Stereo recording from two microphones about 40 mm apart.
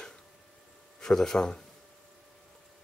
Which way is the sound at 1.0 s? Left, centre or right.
Centre.